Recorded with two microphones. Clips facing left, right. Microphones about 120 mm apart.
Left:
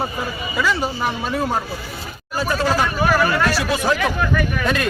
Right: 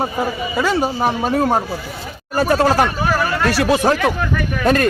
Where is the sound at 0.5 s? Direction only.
40° right (ahead or behind).